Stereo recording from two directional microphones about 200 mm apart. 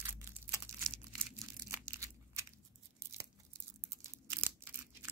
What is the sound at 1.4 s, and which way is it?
Crushing, 15° right (ahead or behind).